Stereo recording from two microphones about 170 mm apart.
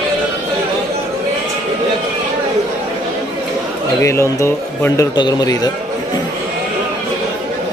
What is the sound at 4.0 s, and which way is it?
A man's voice, 15° left (ahead or behind).